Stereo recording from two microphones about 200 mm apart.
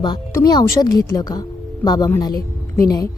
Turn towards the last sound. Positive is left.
turn(degrees=15)  # may be behind; listen again after turning